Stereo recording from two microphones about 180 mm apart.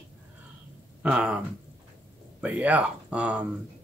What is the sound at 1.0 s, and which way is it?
Speech, 5° right (ahead or behind).